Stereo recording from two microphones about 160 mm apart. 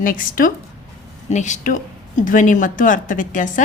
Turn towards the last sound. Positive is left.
turn(degrees=55)  # may be behind; listen again after turning